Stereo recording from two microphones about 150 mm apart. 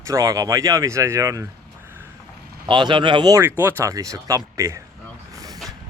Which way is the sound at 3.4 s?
15° right (ahead or behind).